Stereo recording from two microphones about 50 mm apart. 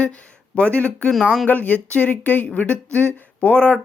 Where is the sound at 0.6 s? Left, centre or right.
Left.